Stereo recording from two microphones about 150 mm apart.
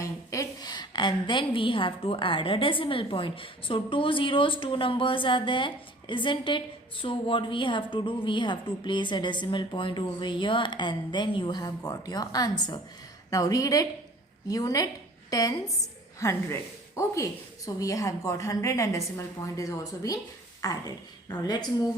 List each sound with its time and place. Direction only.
0.0 s a woman's voice: 20° left (ahead or behind)